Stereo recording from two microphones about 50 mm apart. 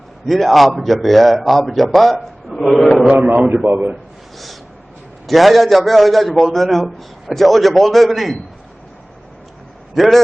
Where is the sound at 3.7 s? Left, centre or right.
Right.